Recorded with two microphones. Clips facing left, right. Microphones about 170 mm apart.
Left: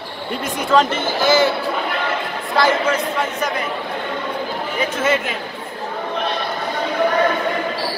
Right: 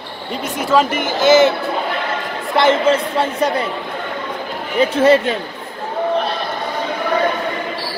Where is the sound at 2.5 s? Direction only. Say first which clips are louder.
Right 4 dB; 25° right (ahead or behind).